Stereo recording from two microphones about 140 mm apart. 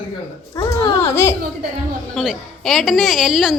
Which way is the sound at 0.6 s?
20° left (ahead or behind).